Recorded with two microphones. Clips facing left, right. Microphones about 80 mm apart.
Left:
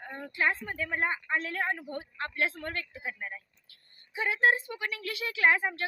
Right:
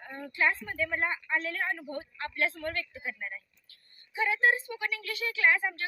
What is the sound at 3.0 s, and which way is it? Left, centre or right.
Speech, left.